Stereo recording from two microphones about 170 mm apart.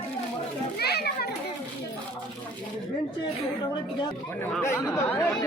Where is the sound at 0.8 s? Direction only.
70° left (ahead or behind).